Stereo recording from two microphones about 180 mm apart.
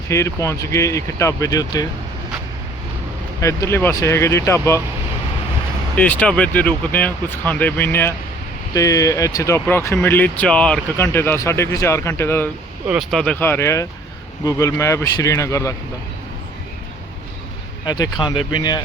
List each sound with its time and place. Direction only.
0.1 s speech: 15° left (ahead or behind)
3.4 s speech: 15° left (ahead or behind)
6.0 s speech: 5° left (ahead or behind)
12.9 s speech: centre (ahead or behind); by 15.7 s 15° left (ahead or behind)
17.8 s speech: 20° left (ahead or behind)